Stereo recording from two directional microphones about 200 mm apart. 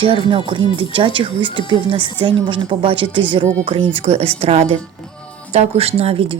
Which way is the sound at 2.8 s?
25° right (ahead or behind).